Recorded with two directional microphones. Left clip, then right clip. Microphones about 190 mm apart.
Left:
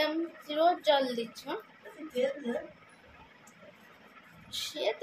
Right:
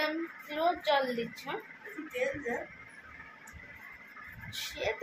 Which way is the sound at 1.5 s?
15° left (ahead or behind).